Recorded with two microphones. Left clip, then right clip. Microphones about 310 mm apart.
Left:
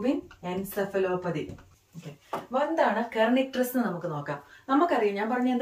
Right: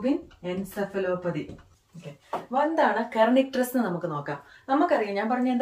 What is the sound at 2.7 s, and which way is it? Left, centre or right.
Speech, right.